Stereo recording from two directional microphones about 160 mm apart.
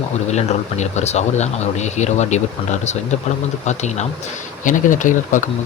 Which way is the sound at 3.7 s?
45° left (ahead or behind).